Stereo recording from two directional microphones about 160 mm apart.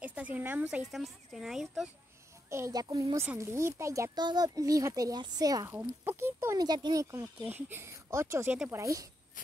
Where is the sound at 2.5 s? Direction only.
20° right (ahead or behind).